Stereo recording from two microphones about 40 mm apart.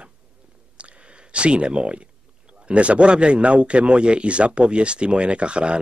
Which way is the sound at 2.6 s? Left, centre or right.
Right.